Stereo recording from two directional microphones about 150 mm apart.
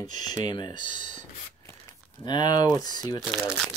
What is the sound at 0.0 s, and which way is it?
Speech, 25° left (ahead or behind).